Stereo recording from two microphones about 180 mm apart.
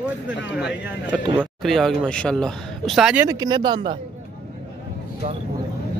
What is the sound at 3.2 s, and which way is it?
Speech, 20° right (ahead or behind).